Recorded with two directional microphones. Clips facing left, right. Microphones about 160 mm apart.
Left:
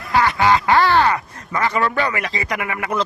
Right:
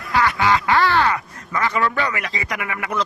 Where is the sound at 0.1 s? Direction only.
35° left (ahead or behind).